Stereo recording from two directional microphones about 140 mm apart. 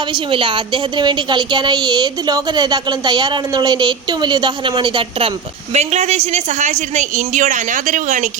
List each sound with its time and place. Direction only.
0.1 s a woman's voice: 35° right (ahead or behind)
5.7 s a woman's voice: 50° right (ahead or behind)